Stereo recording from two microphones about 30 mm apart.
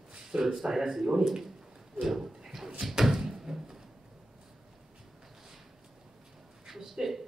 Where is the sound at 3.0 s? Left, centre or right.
Centre.